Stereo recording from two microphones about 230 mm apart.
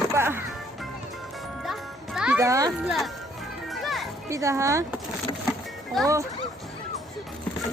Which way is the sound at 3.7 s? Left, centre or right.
Centre.